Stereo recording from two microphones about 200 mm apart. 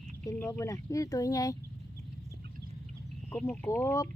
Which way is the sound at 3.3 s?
10° left (ahead or behind).